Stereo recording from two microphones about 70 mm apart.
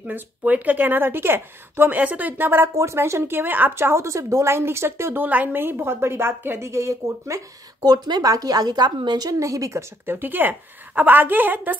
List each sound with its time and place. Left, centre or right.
0.0 s a woman's voice: right
2.7 s speech: right
7.8 s speech: right
9.3 s a woman's voice: right